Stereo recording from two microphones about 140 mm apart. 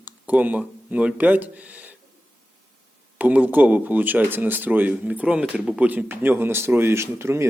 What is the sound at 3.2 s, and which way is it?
Speech, 10° right (ahead or behind).